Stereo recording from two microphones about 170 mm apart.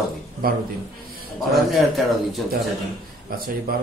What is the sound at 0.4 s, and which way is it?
Speech, 60° right (ahead or behind).